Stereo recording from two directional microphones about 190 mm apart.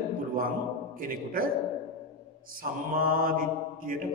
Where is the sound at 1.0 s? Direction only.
50° right (ahead or behind).